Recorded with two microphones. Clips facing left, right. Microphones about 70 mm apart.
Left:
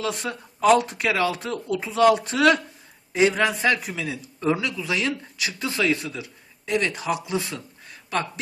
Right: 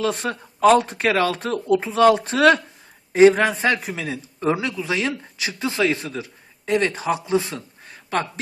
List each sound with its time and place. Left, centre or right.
0.0 s speech: right